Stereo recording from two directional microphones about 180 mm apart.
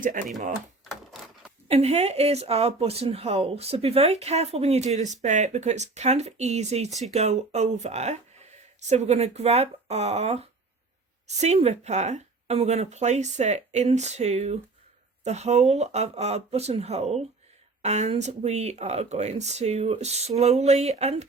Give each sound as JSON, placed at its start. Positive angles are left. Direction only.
{"t": 0.0, "sound": "speech", "side_deg": -50}
{"t": 1.6, "sound": "speech", "side_deg": -35}